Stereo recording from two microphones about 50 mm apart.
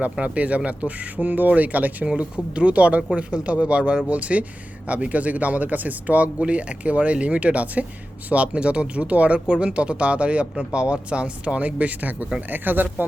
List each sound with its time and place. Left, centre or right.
0.0 s speech: right
2.0 s speech: right